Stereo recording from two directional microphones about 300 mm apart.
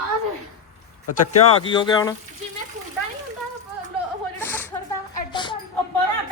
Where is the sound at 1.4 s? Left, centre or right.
Centre.